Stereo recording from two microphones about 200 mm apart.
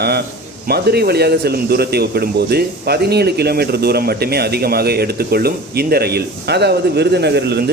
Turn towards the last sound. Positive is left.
turn(degrees=-55)  # may be behind; listen again after turning